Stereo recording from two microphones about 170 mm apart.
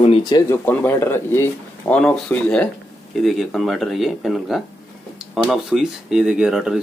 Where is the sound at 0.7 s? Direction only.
15° left (ahead or behind).